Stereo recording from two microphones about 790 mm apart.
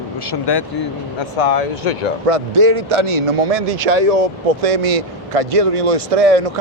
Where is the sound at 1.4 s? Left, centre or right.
Left.